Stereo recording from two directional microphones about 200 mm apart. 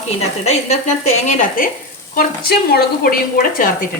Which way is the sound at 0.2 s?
35° left (ahead or behind).